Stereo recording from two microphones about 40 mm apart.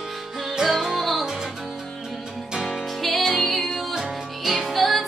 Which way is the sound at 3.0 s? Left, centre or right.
Centre.